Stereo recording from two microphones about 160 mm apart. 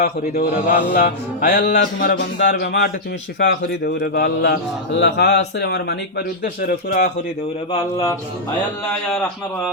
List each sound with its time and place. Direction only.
0.0 s speech: 80° left
1.5 s speech: 90° left
3.3 s speech: 90° left; by 7.1 s 65° left (ahead or behind)
7.7 s speech: 25° left (ahead or behind)